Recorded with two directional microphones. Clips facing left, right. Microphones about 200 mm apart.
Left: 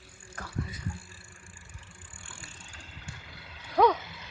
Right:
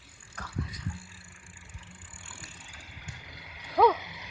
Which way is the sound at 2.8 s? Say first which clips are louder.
Left 1 dB; 10° right (ahead or behind).